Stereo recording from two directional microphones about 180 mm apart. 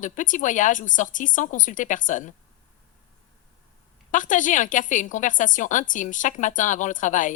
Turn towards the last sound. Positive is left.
turn(degrees=45)  # may be behind; listen again after turning